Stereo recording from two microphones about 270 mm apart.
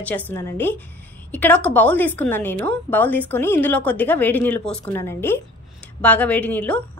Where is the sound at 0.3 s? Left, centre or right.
Centre.